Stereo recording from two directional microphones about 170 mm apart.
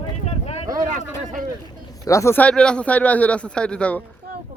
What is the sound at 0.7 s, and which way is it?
Speech, 50° right (ahead or behind).